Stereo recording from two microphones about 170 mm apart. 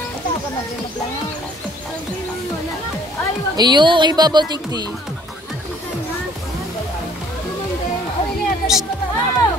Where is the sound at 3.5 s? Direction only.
25° right (ahead or behind).